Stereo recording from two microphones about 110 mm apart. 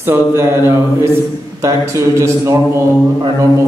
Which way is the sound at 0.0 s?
20° right (ahead or behind).